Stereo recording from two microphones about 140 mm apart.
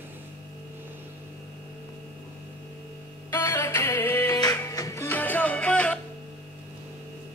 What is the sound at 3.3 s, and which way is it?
Music, 20° left (ahead or behind).